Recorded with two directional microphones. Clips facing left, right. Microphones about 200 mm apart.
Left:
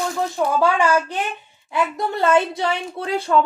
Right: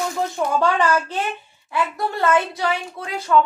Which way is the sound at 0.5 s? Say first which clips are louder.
Left 1 dB; 10° left (ahead or behind).